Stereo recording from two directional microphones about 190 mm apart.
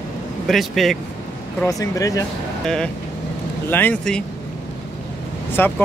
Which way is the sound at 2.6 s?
5° left (ahead or behind).